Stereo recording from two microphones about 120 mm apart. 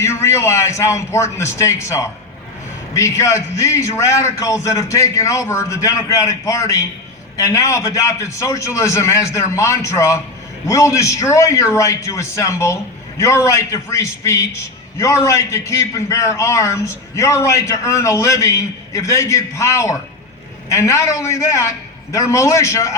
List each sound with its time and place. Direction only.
0.0 s a man's voice: 25° left (ahead or behind)